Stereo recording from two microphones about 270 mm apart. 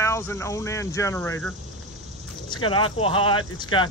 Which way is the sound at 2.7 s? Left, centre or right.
Centre.